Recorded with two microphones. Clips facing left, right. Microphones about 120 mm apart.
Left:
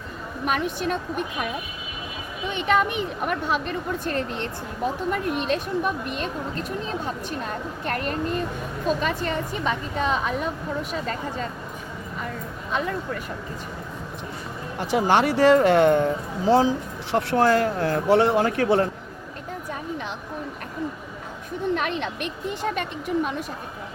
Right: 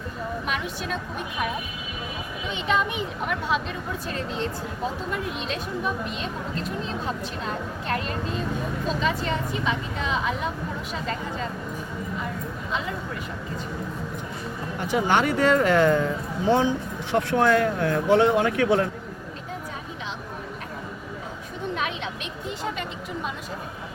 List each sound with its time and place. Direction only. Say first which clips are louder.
0.4 s speech: left 5 dB; 50° left (ahead or behind)
2.5 s a woman's voice: left 3 dB; 55° left (ahead or behind)
7.9 s a woman's voice: left 3 dB; 50° left (ahead or behind)
14.9 s speech: left 2 dB; 30° left (ahead or behind)
21.8 s a sound: left 3 dB; 55° left (ahead or behind)